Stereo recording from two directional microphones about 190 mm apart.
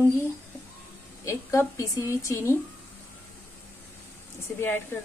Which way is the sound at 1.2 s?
15° left (ahead or behind).